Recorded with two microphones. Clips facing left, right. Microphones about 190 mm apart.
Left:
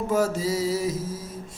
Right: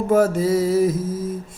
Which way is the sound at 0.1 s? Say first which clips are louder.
Right 8 dB; 55° right (ahead or behind).